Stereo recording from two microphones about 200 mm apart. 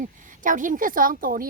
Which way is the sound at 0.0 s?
40° right (ahead or behind).